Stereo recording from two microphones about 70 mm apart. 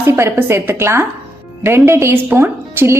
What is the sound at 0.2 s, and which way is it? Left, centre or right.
A woman's voice, right.